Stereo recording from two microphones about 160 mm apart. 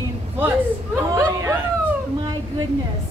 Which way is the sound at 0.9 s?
15° right (ahead or behind).